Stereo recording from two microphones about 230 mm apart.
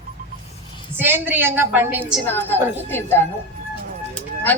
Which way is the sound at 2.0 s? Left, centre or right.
Centre.